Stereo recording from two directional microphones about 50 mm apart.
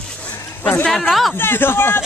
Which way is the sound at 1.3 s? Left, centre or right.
Left.